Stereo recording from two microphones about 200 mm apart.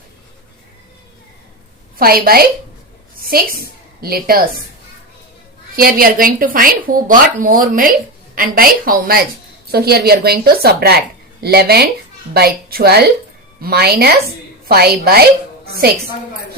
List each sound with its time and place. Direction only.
2.0 s a woman's voice: 50° right (ahead or behind)
5.7 s speech: 45° right (ahead or behind)